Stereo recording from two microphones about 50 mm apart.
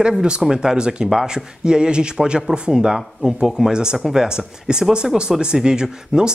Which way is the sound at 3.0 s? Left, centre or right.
Centre.